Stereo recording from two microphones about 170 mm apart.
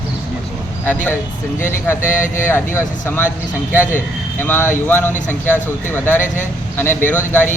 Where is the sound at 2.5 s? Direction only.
15° left (ahead or behind).